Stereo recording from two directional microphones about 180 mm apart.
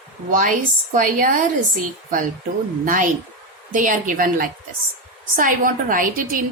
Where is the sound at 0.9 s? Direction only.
50° right (ahead or behind).